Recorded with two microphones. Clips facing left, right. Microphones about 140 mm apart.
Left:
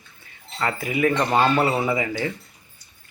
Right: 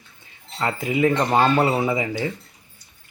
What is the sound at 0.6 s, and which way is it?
Speech, 20° right (ahead or behind).